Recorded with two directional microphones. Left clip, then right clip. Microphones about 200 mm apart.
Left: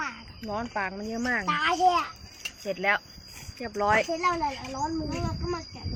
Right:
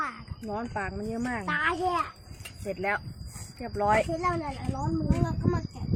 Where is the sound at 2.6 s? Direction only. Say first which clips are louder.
Left 4 dB; centre (ahead or behind).